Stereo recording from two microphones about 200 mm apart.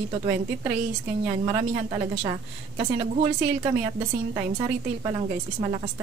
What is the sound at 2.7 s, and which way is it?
Speech, 25° right (ahead or behind).